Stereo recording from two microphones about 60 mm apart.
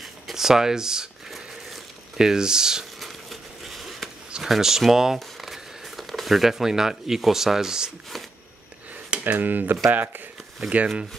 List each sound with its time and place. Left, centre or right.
0.0 s crumpling: centre
3.0 s a sound: centre
4.3 s speech: centre
9.2 s speech: right